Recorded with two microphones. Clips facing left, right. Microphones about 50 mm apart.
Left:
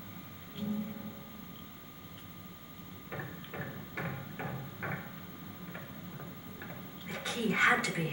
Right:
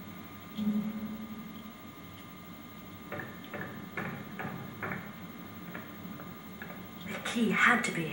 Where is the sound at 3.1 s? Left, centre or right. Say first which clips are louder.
Right 2 dB; centre.